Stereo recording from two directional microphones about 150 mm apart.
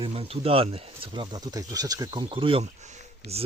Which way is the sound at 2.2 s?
35° right (ahead or behind).